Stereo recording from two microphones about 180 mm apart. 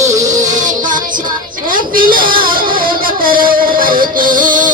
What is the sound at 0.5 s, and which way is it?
Music, 45° right (ahead or behind).